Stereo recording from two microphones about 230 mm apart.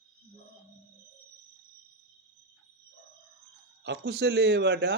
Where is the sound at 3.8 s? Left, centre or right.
Right.